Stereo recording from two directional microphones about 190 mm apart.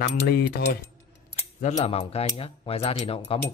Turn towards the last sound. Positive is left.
turn(degrees=30)  # may be behind; listen again after turning